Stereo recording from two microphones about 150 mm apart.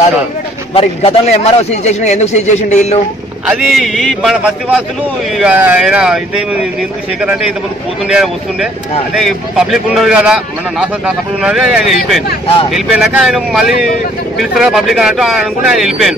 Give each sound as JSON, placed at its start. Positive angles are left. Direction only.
{"t": 0.7, "sound": "a man's voice", "side_deg": 40}
{"t": 3.4, "sound": "a man's voice", "side_deg": -5}
{"t": 8.1, "sound": "a man's voice", "side_deg": -5}